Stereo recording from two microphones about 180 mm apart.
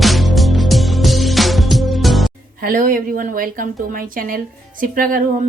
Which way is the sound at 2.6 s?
50° right (ahead or behind).